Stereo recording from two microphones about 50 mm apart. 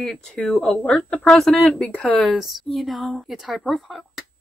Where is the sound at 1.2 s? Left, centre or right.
Centre.